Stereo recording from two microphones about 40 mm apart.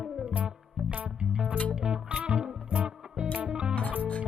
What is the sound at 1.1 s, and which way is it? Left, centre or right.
Music, right.